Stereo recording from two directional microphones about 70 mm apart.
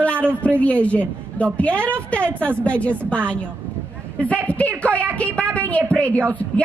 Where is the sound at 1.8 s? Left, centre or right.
Right.